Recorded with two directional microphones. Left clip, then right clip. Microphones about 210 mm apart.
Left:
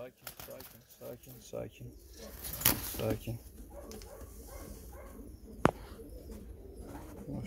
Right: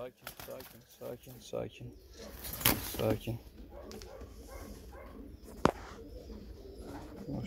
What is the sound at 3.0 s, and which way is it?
Speech, 15° right (ahead or behind).